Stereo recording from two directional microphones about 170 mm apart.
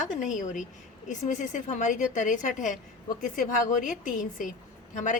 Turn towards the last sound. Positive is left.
turn(degrees=50)  # may be behind; listen again after turning